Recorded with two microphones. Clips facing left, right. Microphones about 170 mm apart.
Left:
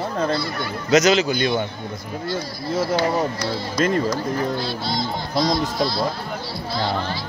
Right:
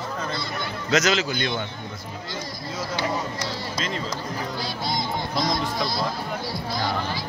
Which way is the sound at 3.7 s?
55° left (ahead or behind).